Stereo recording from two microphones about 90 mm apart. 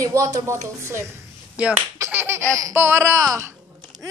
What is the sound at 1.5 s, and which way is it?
Speech, 15° right (ahead or behind).